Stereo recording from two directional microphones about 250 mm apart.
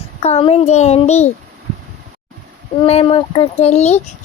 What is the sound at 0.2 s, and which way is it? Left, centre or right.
Speech, left.